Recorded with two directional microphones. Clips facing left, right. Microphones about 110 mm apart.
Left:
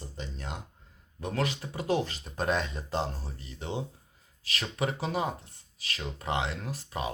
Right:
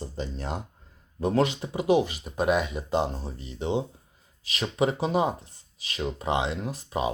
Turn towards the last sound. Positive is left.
turn(degrees=-20)  # may be behind; listen again after turning